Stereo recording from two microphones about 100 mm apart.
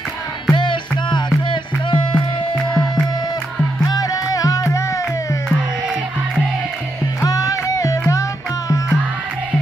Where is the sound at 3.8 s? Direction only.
35° left (ahead or behind).